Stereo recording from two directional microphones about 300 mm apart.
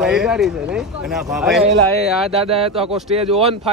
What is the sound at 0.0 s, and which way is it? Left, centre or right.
Speech, centre.